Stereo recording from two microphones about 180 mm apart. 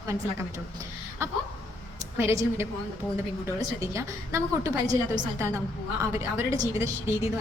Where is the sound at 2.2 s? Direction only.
15° right (ahead or behind).